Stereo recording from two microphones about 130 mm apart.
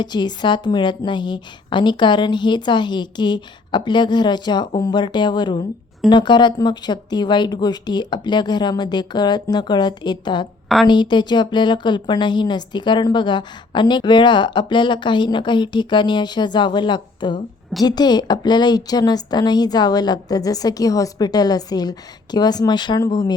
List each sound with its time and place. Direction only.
0.0 s a woman's voice: 35° left (ahead or behind)